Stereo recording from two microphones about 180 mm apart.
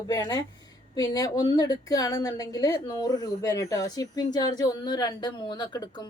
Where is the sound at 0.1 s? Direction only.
20° left (ahead or behind).